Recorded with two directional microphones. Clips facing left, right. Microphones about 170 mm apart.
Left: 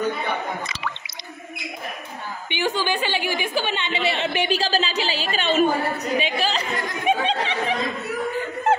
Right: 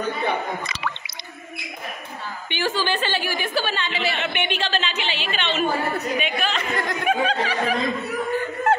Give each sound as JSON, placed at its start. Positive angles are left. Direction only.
{"t": 2.5, "sound": "a woman's voice", "side_deg": 15}
{"t": 6.1, "sound": "a woman's voice", "side_deg": 30}